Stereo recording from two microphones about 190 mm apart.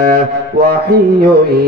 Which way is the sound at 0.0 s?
55° right (ahead or behind).